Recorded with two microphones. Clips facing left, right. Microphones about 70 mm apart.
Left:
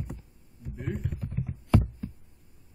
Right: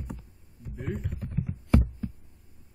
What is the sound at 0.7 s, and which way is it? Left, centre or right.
Speech, centre.